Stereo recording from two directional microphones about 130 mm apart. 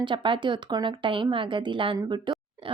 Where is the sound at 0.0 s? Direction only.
35° right (ahead or behind).